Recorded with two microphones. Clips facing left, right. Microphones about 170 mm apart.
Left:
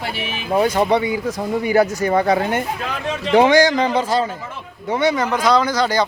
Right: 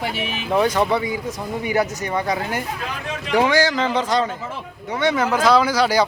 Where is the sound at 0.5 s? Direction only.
10° left (ahead or behind).